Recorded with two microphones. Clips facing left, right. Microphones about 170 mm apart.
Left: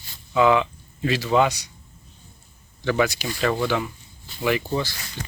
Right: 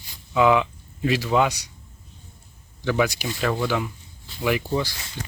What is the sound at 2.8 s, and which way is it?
Speech, 10° right (ahead or behind).